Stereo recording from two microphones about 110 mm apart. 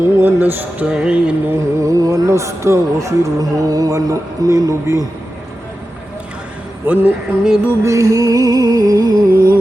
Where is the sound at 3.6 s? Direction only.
35° right (ahead or behind).